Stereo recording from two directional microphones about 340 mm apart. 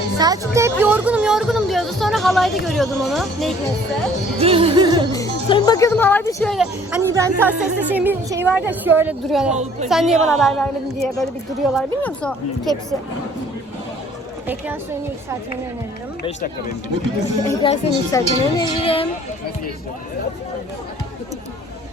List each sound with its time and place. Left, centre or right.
0.2 s speech: centre
4.4 s music: centre
5.1 s speech: centre
9.5 s a woman's voice: centre
9.9 s speech: centre
14.4 s a woman's voice: centre
17.4 s speech: centre